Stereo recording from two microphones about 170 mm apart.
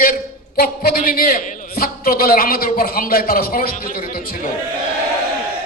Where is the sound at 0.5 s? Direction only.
60° left (ahead or behind).